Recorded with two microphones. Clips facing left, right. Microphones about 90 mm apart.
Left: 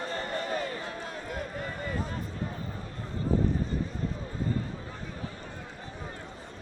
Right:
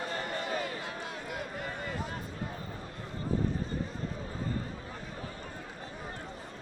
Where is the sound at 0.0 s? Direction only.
35° left (ahead or behind).